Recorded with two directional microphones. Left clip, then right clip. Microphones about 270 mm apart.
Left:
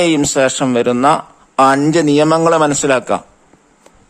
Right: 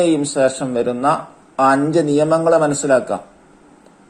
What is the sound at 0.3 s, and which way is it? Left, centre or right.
A man's voice, left.